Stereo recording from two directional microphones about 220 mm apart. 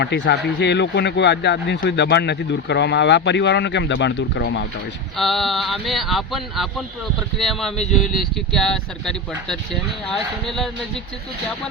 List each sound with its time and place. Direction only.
0.0 s speech: 50° left (ahead or behind)
5.1 s speech: centre (ahead or behind)